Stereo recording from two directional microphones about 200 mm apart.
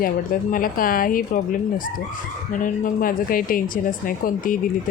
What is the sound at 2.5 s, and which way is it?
Speech, 40° left (ahead or behind).